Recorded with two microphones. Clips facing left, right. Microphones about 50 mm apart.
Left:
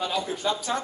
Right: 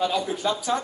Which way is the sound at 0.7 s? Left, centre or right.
Centre.